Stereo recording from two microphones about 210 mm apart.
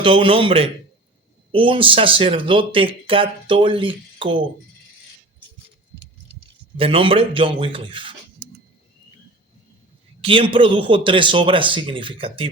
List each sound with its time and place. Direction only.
0.0 s speech: 25° right (ahead or behind)
6.7 s speech: 25° right (ahead or behind)
10.2 s speech: 25° right (ahead or behind)